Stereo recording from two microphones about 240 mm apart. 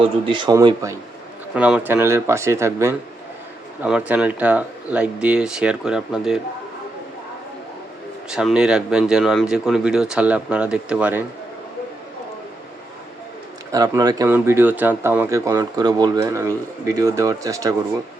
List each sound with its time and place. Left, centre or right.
0.3 s a man's voice: centre
1.5 s speech: centre
8.3 s speech: centre
13.7 s speech: centre